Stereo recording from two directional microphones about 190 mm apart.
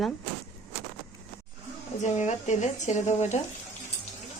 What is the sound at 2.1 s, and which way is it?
Speech, 40° left (ahead or behind).